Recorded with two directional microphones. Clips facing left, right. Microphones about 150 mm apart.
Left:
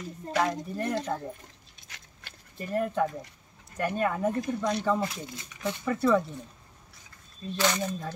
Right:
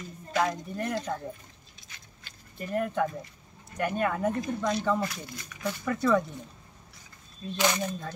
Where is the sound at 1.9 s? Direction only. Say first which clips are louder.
Left 3 dB; 65° left (ahead or behind).